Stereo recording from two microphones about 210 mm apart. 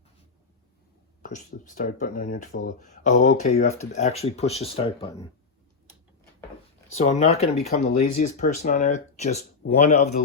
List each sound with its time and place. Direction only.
1.2 s speech: 40° left (ahead or behind); by 5.2 s 25° left (ahead or behind)
6.9 s speech: 35° left (ahead or behind)